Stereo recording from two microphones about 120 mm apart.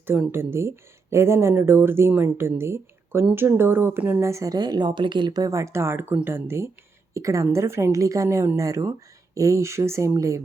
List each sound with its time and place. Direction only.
0.1 s speech: 20° right (ahead or behind)